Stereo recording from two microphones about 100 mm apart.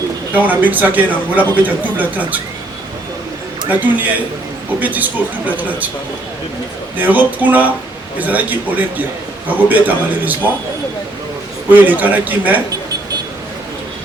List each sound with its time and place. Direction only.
0.3 s speech: 15° right (ahead or behind)
3.7 s speech: 15° right (ahead or behind)
7.0 s speech: 15° right (ahead or behind)
11.7 s speech: 15° right (ahead or behind)